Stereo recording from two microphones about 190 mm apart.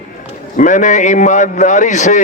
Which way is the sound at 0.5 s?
40° left (ahead or behind).